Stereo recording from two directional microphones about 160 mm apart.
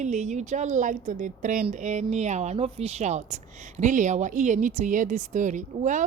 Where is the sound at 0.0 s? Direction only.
50° right (ahead or behind).